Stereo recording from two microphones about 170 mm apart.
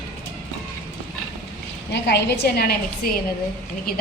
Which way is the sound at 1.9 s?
85° left.